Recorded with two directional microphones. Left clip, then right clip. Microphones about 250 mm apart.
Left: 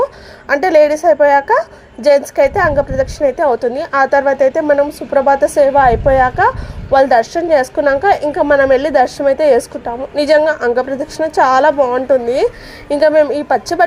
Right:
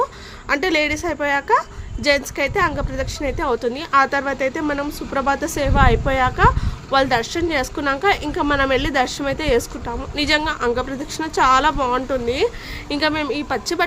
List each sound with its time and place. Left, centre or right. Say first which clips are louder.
0.4 s a woman's voice: left 9 dB; right